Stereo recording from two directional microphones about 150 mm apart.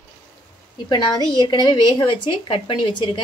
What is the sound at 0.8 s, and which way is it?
Speech, 30° left (ahead or behind).